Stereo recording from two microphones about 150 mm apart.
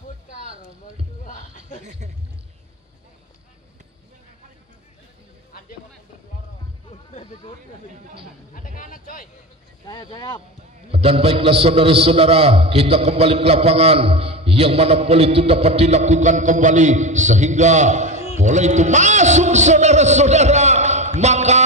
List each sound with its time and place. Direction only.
1.2 s music: 60° left (ahead or behind)
6.9 s a sound: 45° left (ahead or behind)
8.5 s a man's voice: 65° left (ahead or behind)
10.1 s speech: 30° left (ahead or behind)
10.9 s a man's voice: 40° right (ahead or behind)